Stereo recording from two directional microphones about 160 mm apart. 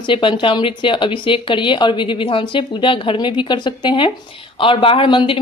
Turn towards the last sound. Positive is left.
turn(degrees=30)  # may be behind; listen again after turning